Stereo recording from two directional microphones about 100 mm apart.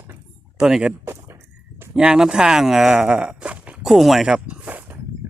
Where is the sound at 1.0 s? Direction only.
25° right (ahead or behind).